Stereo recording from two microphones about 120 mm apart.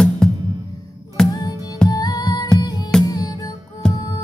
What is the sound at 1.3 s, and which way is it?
Music, 30° left (ahead or behind).